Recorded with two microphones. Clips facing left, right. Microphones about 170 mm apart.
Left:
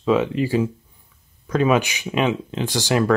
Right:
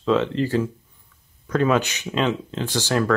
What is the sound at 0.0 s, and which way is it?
Speech, 10° left (ahead or behind).